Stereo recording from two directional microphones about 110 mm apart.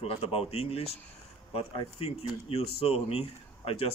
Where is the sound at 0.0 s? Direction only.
65° left (ahead or behind).